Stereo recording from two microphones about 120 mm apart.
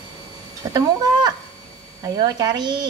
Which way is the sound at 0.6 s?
30° right (ahead or behind).